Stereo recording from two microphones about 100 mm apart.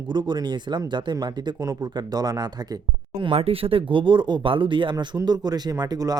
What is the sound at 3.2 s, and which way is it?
Speech, 75° right (ahead or behind).